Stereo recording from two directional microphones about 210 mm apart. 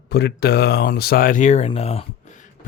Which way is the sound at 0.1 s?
50° left (ahead or behind).